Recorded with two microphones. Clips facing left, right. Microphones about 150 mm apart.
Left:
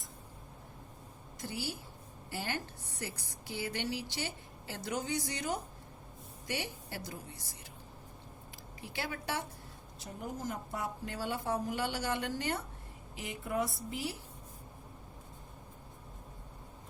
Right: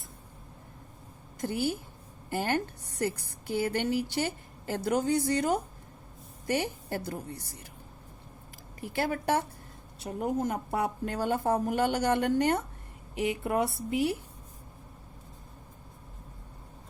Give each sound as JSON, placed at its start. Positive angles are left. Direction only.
{"t": 1.4, "sound": "a woman's voice", "side_deg": -50}
{"t": 8.8, "sound": "a woman's voice", "side_deg": -50}
{"t": 10.0, "sound": "a woman's voice", "side_deg": -65}